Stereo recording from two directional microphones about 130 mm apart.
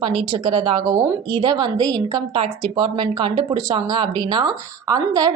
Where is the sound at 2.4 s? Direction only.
45° right (ahead or behind).